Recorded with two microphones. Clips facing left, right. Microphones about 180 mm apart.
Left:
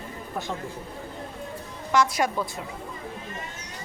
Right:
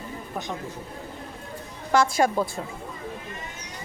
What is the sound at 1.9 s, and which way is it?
Speech, 30° right (ahead or behind).